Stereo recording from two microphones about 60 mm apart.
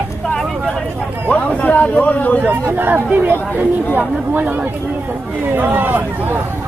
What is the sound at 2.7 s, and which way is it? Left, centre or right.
Speech, right.